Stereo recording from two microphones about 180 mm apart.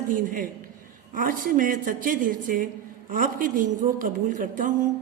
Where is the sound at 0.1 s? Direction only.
50° right (ahead or behind).